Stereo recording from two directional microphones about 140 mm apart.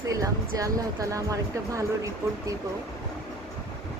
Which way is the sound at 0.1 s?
25° right (ahead or behind).